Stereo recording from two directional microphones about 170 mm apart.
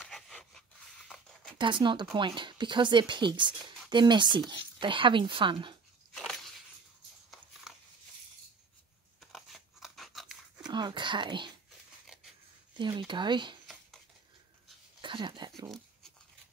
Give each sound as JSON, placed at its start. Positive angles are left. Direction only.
{"t": 0.0, "sound": "a sound", "side_deg": 5}
{"t": 1.6, "sound": "speech", "side_deg": -30}
{"t": 6.1, "sound": "a sound", "side_deg": 0}
{"t": 9.2, "sound": "scissors", "side_deg": 0}
{"t": 10.7, "sound": "speech", "side_deg": -25}
{"t": 12.7, "sound": "speech", "side_deg": -30}
{"t": 15.0, "sound": "speech", "side_deg": -30}